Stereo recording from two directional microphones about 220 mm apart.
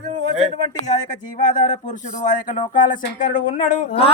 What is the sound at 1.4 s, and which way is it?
Speech, 35° left (ahead or behind).